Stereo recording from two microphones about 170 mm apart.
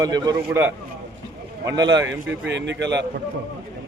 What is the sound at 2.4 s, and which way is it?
Speech, 90° right.